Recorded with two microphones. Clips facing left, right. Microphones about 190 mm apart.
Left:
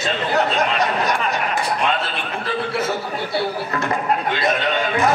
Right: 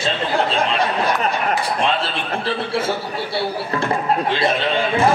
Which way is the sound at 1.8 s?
30° right (ahead or behind).